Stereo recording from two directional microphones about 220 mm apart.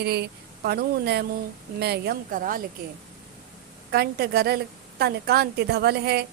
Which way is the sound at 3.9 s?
45° right (ahead or behind).